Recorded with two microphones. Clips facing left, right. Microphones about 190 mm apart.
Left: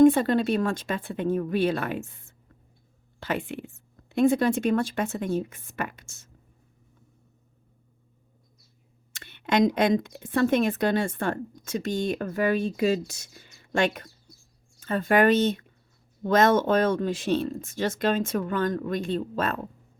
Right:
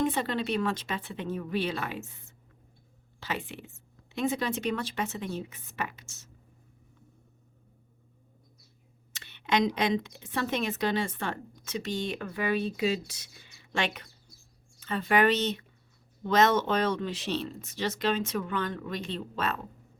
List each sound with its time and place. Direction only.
0.0 s speech: 50° left (ahead or behind)
9.1 s speech: 50° left (ahead or behind)